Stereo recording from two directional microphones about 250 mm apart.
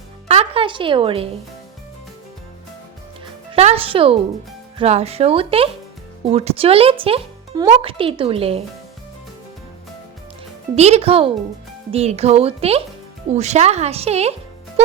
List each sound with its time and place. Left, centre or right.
0.3 s speech: right
3.5 s speech: right
10.8 s speech: right